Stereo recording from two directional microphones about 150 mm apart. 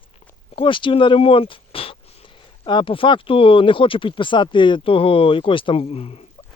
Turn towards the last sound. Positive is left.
turn(degrees=40)  # may be behind; listen again after turning